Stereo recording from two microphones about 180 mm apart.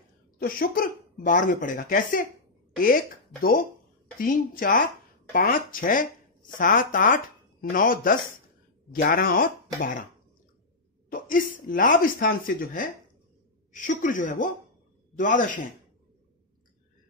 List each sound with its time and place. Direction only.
0.4 s speech: 50° left (ahead or behind)
4.2 s speech: 50° left (ahead or behind)
11.1 s speech: 50° left (ahead or behind)